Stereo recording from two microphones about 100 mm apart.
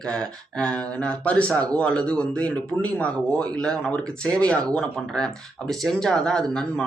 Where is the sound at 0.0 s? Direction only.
10° left (ahead or behind).